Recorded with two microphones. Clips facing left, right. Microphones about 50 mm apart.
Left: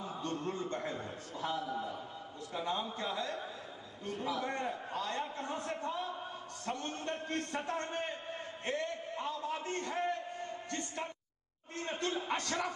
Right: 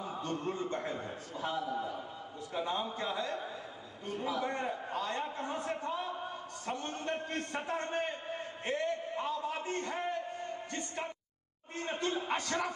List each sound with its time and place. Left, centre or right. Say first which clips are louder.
0.2 s a man's voice: right 1 dB; centre
8.6 s a sound: right 3 dB; centre
12.2 s a man's voice: right 2 dB; centre